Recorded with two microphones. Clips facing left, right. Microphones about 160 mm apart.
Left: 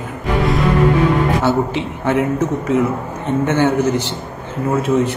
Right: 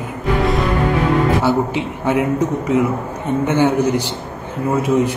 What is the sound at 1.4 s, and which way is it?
A man's voice, 10° right (ahead or behind).